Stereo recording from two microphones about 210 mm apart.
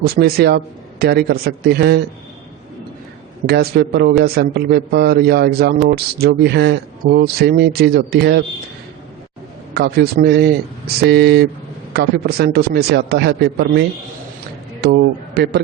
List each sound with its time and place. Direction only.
0.0 s speech: 45° right (ahead or behind)
3.4 s speech: 50° right (ahead or behind)
9.7 s a man's voice: 50° right (ahead or behind)